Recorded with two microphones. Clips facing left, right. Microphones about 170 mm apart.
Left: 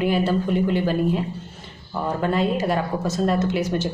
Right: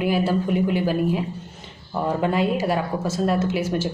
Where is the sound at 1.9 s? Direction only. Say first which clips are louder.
Right 1 dB; 20° right (ahead or behind).